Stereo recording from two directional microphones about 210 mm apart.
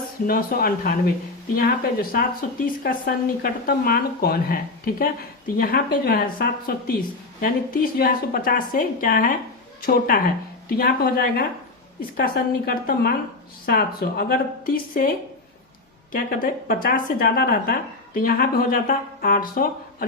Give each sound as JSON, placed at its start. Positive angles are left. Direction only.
{"t": 0.3, "sound": "speech", "side_deg": 45}
{"t": 10.8, "sound": "speech", "side_deg": 45}
{"t": 16.1, "sound": "speech", "side_deg": 40}